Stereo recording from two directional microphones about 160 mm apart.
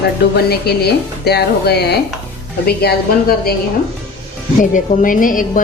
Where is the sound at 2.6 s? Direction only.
75° left (ahead or behind).